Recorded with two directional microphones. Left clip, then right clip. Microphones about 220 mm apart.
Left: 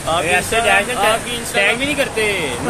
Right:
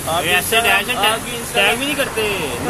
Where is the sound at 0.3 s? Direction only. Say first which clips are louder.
Right 1 dB; 35° right (ahead or behind).